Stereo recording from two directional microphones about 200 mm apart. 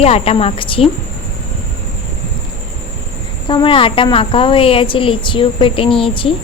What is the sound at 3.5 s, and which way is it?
A woman's voice, 25° left (ahead or behind).